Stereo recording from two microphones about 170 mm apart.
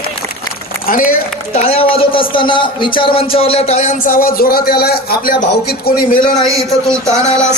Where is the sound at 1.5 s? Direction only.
40° left (ahead or behind); by 5.7 s 65° left (ahead or behind).